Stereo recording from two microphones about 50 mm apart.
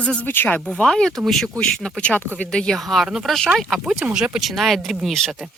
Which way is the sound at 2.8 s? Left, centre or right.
Centre.